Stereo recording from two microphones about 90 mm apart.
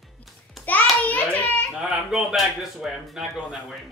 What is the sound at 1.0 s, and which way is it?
Hands, 15° left (ahead or behind).